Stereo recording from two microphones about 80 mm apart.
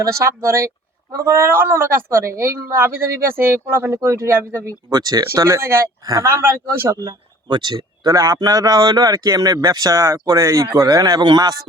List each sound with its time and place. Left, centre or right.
0.0 s speech: right
4.9 s speech: right
5.3 s speech: right
6.9 s a sound: right
7.5 s speech: right
8.0 s speech: right
11.2 s speech: right